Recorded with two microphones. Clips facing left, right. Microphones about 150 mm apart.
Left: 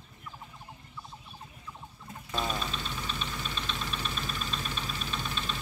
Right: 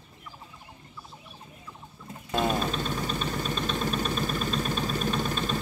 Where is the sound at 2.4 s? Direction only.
45° right (ahead or behind).